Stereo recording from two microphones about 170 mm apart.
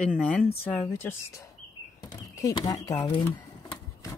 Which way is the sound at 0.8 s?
15° left (ahead or behind).